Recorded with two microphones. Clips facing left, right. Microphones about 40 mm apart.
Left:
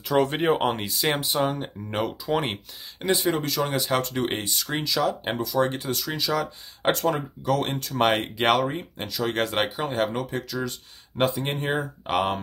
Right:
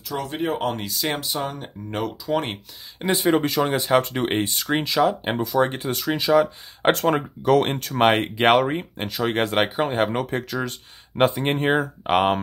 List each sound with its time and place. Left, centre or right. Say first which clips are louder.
0.1 s speech: left 4 dB; left
0.6 s speech: left 1 dB; centre
0.8 s speech: left 1 dB; centre
3.1 s speech: right 4 dB; right
3.9 s speech: right 5 dB; centre
4.4 s speech: right 6 dB; right
6.9 s speech: right 4 dB; right
8.0 s speech: right 4 dB; right